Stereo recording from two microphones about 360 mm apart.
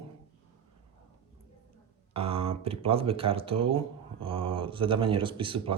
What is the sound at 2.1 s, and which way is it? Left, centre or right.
Speech, centre.